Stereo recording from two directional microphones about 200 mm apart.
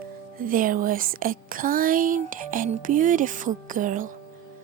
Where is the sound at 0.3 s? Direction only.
45° right (ahead or behind).